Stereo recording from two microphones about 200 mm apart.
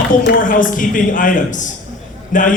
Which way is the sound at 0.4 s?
40° left (ahead or behind).